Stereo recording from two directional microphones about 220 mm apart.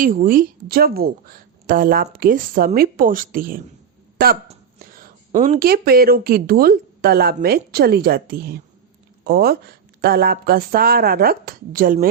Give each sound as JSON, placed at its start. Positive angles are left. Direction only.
{"t": 0.0, "sound": "a woman's voice", "side_deg": -40}
{"t": 4.9, "sound": "speech", "side_deg": -35}